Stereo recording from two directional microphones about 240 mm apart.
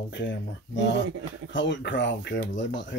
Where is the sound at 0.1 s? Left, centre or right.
Left.